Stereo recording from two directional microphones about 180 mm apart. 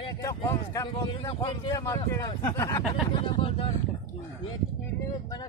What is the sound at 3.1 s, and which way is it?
Speech, 30° left (ahead or behind).